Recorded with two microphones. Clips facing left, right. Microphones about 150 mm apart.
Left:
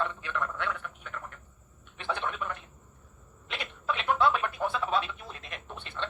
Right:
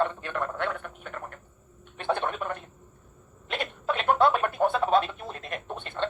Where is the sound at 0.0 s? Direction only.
50° right (ahead or behind).